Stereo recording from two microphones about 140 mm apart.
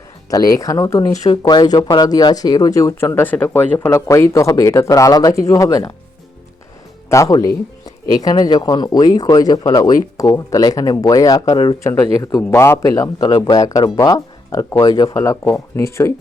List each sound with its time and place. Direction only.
0.3 s speech: 25° left (ahead or behind)
1.1 s speech: 55° left (ahead or behind)
1.4 s speech: 30° left (ahead or behind)
7.1 s speech: 25° left (ahead or behind)